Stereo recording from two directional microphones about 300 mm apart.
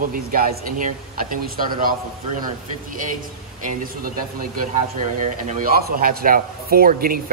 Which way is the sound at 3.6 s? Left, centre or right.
Right.